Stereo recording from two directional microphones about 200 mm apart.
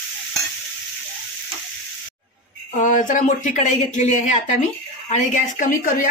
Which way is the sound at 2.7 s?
40° left (ahead or behind).